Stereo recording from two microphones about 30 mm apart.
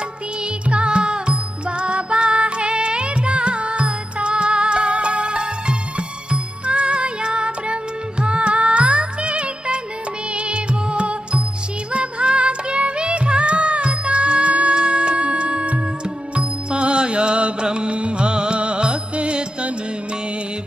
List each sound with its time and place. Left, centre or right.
0.7 s music: right